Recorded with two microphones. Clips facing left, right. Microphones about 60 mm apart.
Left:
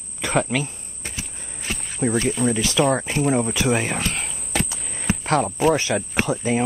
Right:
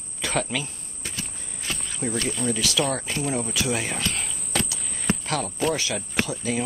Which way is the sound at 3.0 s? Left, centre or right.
Left.